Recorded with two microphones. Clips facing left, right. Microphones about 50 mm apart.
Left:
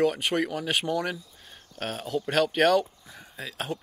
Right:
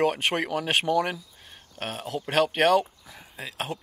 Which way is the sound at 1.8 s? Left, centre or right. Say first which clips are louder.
Left 2 dB; right.